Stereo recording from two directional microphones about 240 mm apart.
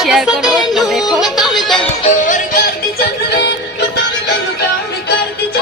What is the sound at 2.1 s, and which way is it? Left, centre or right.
Music, left.